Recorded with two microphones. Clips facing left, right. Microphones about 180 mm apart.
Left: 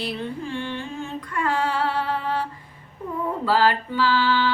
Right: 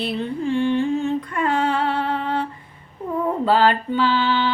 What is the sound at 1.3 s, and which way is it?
Female singing, 20° right (ahead or behind).